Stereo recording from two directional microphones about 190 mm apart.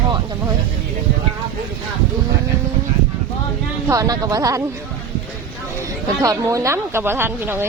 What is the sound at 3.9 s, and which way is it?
Speech, 20° right (ahead or behind).